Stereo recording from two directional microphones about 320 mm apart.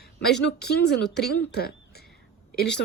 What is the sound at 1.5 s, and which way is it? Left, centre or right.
Speech, left.